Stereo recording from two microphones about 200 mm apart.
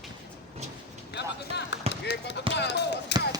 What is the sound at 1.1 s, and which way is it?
Speech, 60° left (ahead or behind).